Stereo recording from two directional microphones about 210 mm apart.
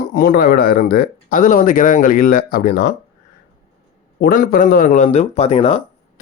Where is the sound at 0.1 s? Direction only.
45° left (ahead or behind).